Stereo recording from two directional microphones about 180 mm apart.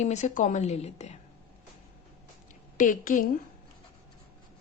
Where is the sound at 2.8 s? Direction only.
45° left (ahead or behind).